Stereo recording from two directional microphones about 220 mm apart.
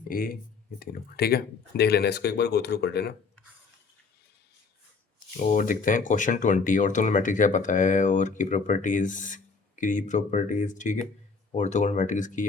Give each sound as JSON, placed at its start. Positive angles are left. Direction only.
{"t": 0.1, "sound": "speech", "side_deg": 40}
{"t": 5.4, "sound": "speech", "side_deg": 35}